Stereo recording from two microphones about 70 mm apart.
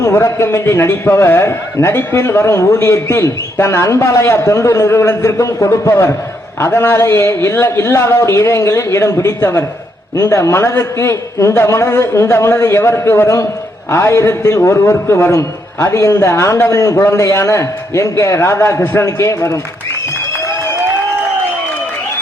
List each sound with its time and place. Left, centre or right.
0.0 s a man's voice: left
10.2 s a man's voice: left
11.1 s a man's voice: left
11.5 s a man's voice: left
17.0 s a man's voice: left
17.2 s a man's voice: left